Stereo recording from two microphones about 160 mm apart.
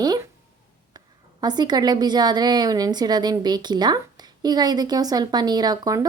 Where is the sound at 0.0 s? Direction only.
25° right (ahead or behind).